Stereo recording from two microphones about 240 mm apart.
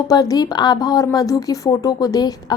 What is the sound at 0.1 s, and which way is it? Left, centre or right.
A woman's voice, centre.